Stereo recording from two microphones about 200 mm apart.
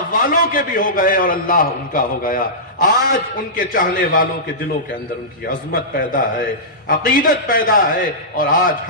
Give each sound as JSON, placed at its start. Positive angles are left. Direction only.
{"t": 0.1, "sound": "a man's voice", "side_deg": 45}
{"t": 5.5, "sound": "a man's voice", "side_deg": 45}